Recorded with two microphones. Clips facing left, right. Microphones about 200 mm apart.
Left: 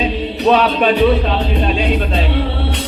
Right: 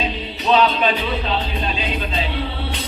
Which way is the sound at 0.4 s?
65° left (ahead or behind).